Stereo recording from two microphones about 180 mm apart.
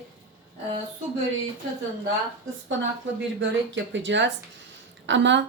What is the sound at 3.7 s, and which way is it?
Speech, 90° right.